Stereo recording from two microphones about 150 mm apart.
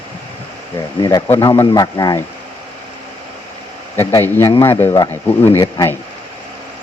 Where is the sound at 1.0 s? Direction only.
25° left (ahead or behind).